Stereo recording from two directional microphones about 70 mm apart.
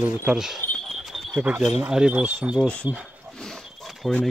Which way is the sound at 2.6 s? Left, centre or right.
Centre.